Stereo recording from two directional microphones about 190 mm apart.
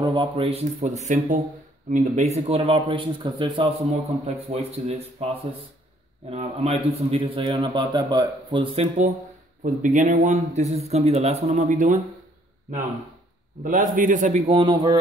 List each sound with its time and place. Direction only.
0.0 s a man's voice: 25° right (ahead or behind)
9.6 s a man's voice: 45° right (ahead or behind)
13.7 s a man's voice: 45° right (ahead or behind)
14.6 s a man's voice: 25° right (ahead or behind)